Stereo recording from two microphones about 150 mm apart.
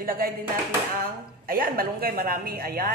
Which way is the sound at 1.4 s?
75° right (ahead or behind).